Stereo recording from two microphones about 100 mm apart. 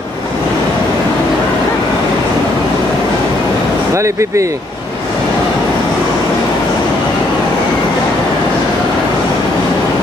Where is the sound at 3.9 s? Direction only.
30° right (ahead or behind).